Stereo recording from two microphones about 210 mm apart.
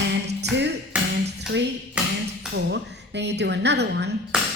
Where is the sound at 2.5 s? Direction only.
55° right (ahead or behind).